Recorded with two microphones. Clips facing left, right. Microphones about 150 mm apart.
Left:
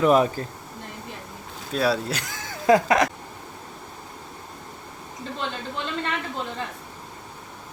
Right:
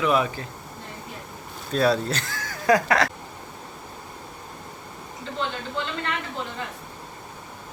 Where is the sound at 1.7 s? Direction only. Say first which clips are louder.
Right 2 dB; 5° left (ahead or behind).